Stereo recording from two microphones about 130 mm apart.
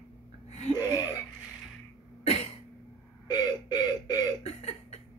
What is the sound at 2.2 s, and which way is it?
Cough, 50° left (ahead or behind).